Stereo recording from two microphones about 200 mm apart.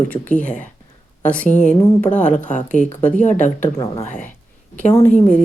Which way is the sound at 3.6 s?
15° left (ahead or behind).